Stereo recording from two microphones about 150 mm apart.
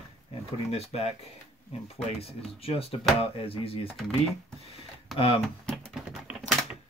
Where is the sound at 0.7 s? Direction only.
40° left (ahead or behind).